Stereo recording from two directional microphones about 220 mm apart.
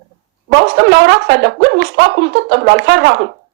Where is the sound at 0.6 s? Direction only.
50° right (ahead or behind).